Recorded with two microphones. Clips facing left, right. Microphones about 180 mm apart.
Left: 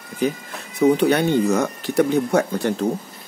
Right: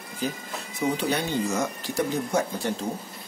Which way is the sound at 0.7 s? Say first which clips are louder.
Left 10 dB; 60° left (ahead or behind).